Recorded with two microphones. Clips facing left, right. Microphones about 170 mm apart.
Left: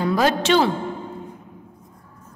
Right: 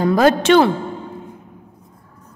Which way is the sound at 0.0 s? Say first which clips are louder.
Right 5 dB; 50° right (ahead or behind).